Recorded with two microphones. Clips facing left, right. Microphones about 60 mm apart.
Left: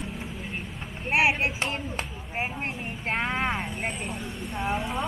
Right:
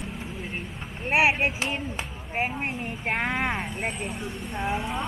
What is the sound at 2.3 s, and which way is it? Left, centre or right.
Speech, centre.